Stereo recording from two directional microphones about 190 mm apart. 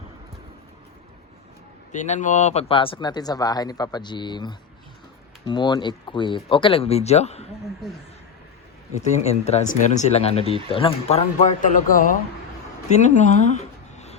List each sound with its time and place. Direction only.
1.9 s speech: 40° left (ahead or behind)
9.0 s speech: 35° left (ahead or behind)